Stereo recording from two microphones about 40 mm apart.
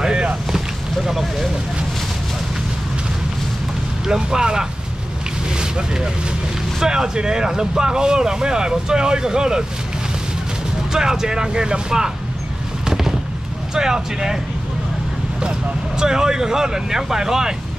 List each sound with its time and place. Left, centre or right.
0.0 s boat: right
1.0 s speech: centre
4.0 s speech: centre
10.9 s speech: centre
12.8 s fireworks: centre
13.7 s speech: centre
16.0 s speech: centre